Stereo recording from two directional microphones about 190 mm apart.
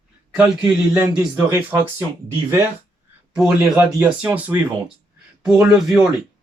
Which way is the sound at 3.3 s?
5° right (ahead or behind).